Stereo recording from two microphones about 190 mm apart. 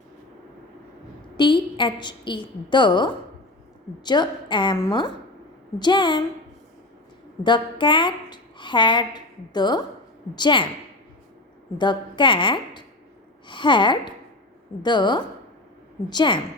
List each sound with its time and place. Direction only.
1.4 s a woman's voice: 25° left (ahead or behind)
7.4 s a woman's voice: 25° left (ahead or behind)
11.8 s a woman's voice: 25° left (ahead or behind)